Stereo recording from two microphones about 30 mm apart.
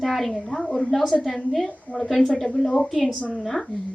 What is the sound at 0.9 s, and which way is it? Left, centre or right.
Speech, centre.